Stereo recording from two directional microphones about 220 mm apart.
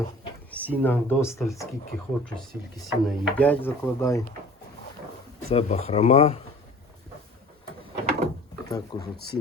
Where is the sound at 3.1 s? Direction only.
5° left (ahead or behind).